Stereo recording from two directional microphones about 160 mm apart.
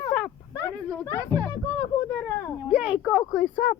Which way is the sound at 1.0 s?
15° left (ahead or behind).